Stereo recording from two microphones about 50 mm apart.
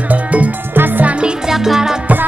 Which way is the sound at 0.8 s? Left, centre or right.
Right.